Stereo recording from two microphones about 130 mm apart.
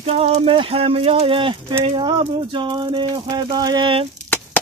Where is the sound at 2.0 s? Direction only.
40° right (ahead or behind).